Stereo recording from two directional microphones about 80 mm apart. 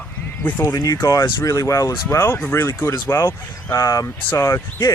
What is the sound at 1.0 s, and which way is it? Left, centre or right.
Speech, left.